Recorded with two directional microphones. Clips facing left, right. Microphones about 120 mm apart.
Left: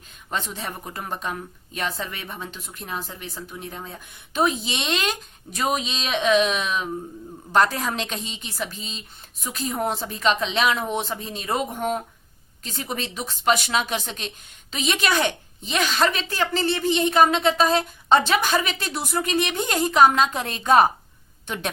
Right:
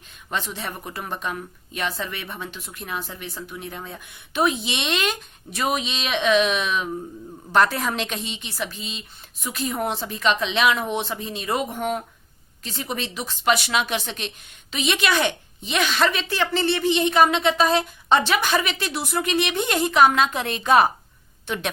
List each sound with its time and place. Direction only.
0.3 s a woman's voice: 40° left (ahead or behind)